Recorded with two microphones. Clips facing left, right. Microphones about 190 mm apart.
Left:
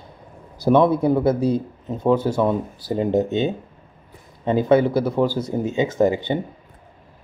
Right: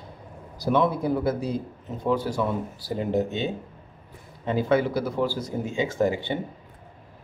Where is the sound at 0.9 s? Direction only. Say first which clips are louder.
Left 7 dB; 25° left (ahead or behind).